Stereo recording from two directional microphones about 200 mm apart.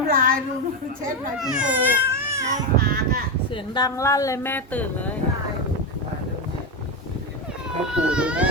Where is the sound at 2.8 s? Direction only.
50° right (ahead or behind).